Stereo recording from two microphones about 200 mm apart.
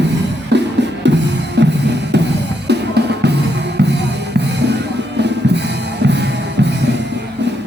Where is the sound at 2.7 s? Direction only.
55° right (ahead or behind).